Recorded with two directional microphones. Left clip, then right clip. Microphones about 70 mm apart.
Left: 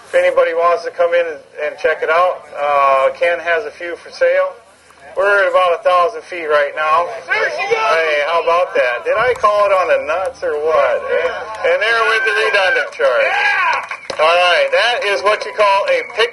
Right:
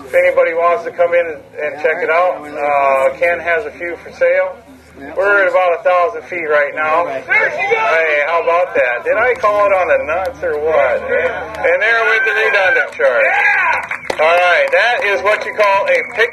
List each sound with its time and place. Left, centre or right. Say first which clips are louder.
0.1 s a man's voice: right 1 dB; centre